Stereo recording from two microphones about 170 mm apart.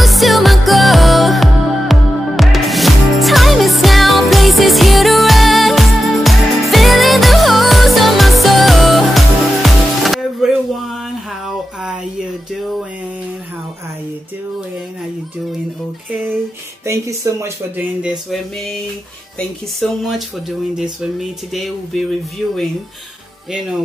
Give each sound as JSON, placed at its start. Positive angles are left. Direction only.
{"t": 0.0, "sound": "music", "side_deg": 0}
{"t": 16.8, "sound": "speech", "side_deg": -15}
{"t": 19.3, "sound": "speech", "side_deg": 0}
{"t": 22.4, "sound": "speech", "side_deg": 5}